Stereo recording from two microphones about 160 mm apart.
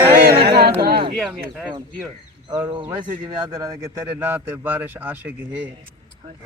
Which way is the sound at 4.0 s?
15° right (ahead or behind).